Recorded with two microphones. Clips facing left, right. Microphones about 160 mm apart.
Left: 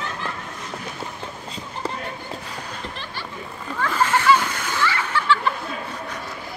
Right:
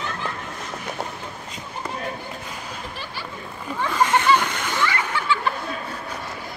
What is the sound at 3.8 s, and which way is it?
Splash, 15° right (ahead or behind).